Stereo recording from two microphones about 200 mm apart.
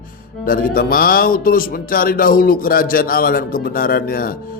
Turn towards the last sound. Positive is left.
turn(degrees=45)  # may be behind; listen again after turning